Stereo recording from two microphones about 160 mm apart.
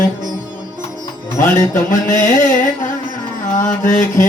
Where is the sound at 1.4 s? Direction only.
50° left (ahead or behind).